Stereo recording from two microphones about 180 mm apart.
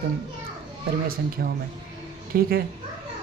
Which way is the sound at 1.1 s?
55° right (ahead or behind).